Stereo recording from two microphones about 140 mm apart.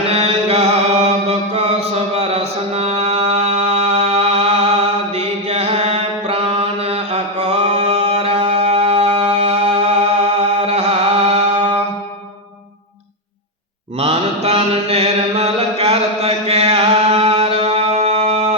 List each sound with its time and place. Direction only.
0.1 s mantra: 45° right (ahead or behind)
14.0 s mantra: 45° right (ahead or behind)